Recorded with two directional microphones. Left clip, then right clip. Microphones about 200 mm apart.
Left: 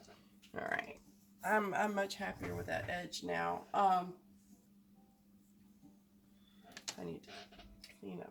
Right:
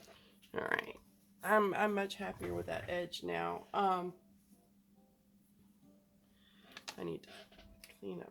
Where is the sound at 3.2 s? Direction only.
45° right (ahead or behind).